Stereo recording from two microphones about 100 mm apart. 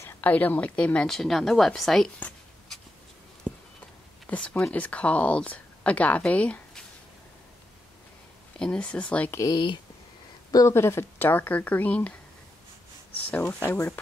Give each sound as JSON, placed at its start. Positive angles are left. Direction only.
{"t": 0.2, "sound": "speech", "side_deg": 15}
{"t": 4.3, "sound": "speech", "side_deg": 10}
{"t": 8.5, "sound": "speech", "side_deg": 10}
{"t": 9.5, "sound": "speech", "side_deg": 50}
{"t": 10.5, "sound": "speech", "side_deg": 30}
{"t": 13.4, "sound": "speech", "side_deg": 25}